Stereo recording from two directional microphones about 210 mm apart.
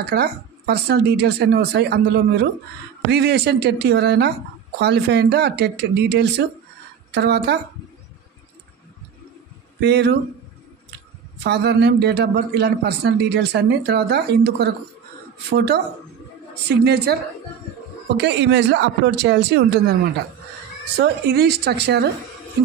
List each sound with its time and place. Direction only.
0.1 s a man's voice: 50° right (ahead or behind)
9.8 s speech: 55° right (ahead or behind)
11.4 s a man's voice: 55° right (ahead or behind)
21.0 s a man's voice: 50° right (ahead or behind)